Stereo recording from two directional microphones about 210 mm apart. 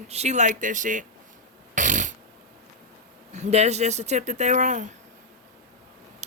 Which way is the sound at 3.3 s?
30° right (ahead or behind).